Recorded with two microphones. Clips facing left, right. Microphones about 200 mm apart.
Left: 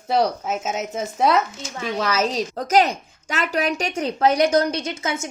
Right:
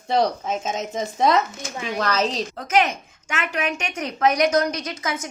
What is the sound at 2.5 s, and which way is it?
A woman's voice, 40° left (ahead or behind).